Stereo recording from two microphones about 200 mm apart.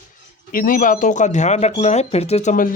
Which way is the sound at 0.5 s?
45° left (ahead or behind).